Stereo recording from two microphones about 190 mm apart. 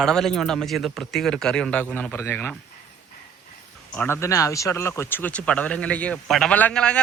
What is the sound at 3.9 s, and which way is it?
Speech, 10° left (ahead or behind).